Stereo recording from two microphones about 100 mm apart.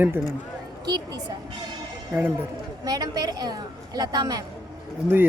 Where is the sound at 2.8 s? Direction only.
40° right (ahead or behind).